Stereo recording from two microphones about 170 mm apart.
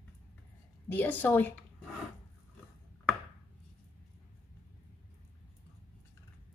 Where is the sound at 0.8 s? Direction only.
10° left (ahead or behind).